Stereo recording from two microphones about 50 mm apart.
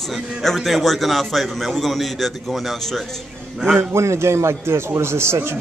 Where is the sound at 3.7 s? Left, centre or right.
Right.